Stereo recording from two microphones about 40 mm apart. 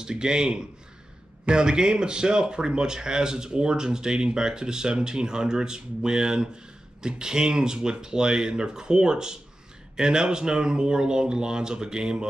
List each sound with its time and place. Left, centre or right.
0.0 s speech: right